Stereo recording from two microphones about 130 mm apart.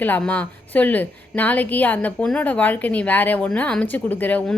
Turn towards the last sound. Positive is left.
turn(degrees=10)  # may be behind; listen again after turning